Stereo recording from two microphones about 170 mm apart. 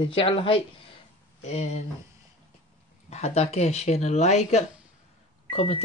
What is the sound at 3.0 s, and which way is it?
Speech, 40° left (ahead or behind).